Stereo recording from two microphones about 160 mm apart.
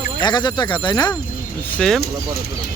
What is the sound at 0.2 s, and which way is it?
Speech, 25° left (ahead or behind).